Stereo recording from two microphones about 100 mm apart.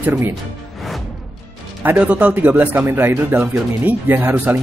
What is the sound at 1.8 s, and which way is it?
Speech, 15° right (ahead or behind).